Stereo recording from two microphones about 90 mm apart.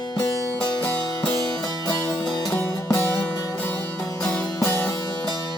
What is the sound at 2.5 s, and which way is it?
Music, 20° left (ahead or behind).